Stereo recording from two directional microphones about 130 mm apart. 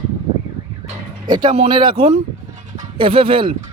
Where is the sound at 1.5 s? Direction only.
50° right (ahead or behind).